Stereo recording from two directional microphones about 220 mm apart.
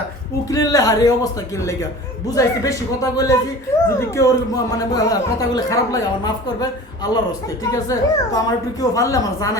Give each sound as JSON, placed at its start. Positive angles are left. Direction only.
{"t": 0.5, "sound": "a woman's voice", "side_deg": 15}